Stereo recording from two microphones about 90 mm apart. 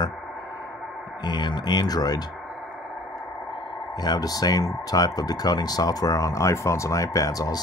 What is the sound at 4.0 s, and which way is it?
Speech, 45° left (ahead or behind).